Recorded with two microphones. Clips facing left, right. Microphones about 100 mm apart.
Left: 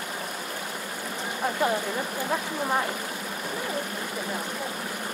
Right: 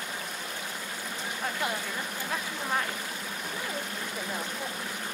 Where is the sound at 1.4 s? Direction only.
30° left (ahead or behind).